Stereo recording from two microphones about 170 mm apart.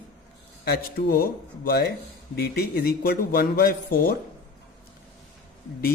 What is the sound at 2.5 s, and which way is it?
A man's voice, 65° left (ahead or behind).